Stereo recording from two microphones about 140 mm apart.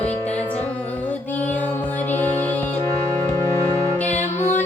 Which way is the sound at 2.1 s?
15° left (ahead or behind).